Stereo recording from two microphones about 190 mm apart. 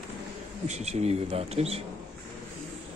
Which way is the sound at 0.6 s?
35° right (ahead or behind).